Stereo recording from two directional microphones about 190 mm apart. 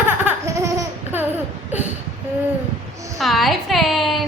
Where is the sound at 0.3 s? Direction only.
15° right (ahead or behind).